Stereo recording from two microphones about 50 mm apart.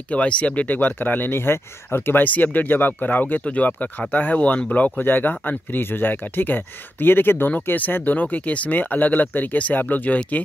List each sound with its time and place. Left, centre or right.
0.1 s speech: left
2.2 s speech: left